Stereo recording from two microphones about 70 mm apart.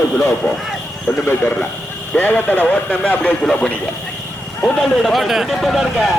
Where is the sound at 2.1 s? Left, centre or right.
Left.